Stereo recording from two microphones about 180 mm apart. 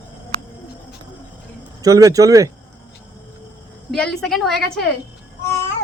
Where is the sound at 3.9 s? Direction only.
5° left (ahead or behind).